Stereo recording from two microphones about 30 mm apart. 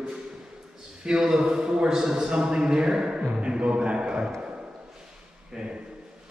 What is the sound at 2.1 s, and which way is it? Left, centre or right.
A man's voice, right.